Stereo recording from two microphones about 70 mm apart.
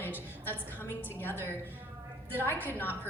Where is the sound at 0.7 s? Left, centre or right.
Left.